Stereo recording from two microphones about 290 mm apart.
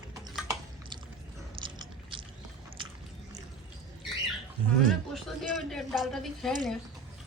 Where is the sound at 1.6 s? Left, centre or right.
Centre.